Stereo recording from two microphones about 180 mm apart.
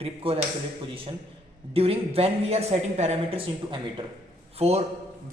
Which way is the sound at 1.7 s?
35° right (ahead or behind).